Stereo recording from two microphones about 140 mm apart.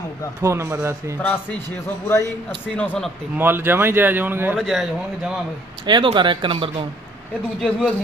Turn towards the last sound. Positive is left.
turn(degrees=5)  # may be behind; listen again after turning